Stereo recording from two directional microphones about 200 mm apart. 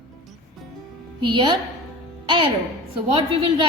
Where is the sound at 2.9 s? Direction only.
25° right (ahead or behind).